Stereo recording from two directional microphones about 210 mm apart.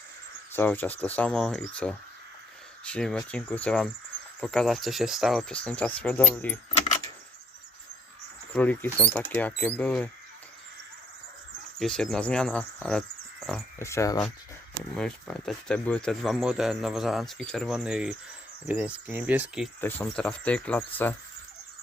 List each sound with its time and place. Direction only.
0.5 s speech: 10° left (ahead or behind)
6.7 s keys jangling: 35° left (ahead or behind)
8.5 s speech: 10° left (ahead or behind)
11.8 s speech: centre (ahead or behind)
13.7 s speech: 15° left (ahead or behind)
14.9 s speech: centre (ahead or behind)
18.7 s cricket: 10° right (ahead or behind)
19.8 s speech: 5° left (ahead or behind)